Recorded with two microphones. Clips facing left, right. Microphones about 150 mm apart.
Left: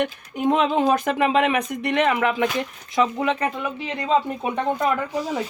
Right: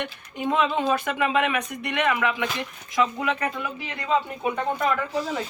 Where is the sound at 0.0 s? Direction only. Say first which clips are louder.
Left 7 dB; 45° left (ahead or behind); by 4.9 s 25° left (ahead or behind).